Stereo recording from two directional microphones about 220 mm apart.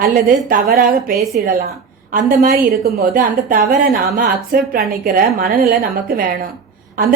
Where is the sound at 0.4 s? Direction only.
40° right (ahead or behind).